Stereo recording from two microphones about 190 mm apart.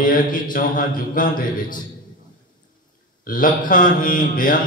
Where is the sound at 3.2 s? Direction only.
45° left (ahead or behind).